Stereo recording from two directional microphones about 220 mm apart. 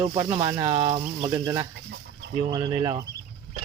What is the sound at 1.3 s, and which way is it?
Speech, 10° right (ahead or behind).